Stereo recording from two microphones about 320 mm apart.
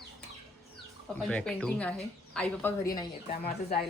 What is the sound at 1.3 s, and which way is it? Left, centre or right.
Speech, centre.